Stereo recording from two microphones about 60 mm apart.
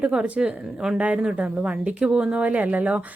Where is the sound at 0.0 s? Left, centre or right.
Centre.